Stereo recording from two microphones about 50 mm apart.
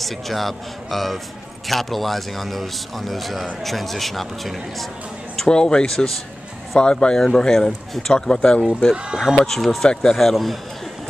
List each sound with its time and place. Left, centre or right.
0.0 s a man's voice: centre
5.3 s speech: centre
6.8 s speech: centre
9.4 s a man's voice: centre